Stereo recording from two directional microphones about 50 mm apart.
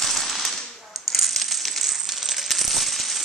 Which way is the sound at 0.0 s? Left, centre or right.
Centre.